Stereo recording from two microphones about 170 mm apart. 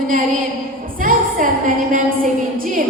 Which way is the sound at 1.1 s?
55° right (ahead or behind).